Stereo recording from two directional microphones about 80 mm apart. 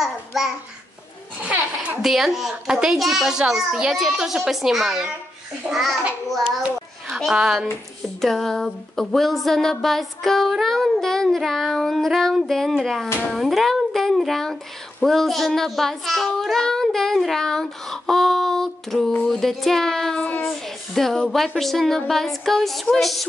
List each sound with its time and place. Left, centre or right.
0.0 s babbling: centre
1.4 s a sound: centre
2.0 s speech: centre
7.2 s speech: centre
19.2 s child singing: centre
20.4 s speech: centre